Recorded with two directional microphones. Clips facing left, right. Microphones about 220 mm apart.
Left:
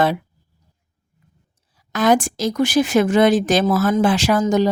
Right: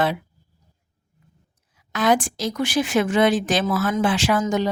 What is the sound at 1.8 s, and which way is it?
A woman's voice, 40° left (ahead or behind).